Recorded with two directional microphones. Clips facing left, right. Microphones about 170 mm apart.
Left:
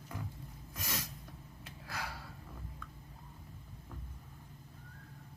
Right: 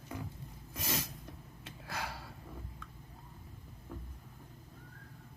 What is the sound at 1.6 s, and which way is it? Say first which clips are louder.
Gasp: right 2 dB; 25° right (ahead or behind).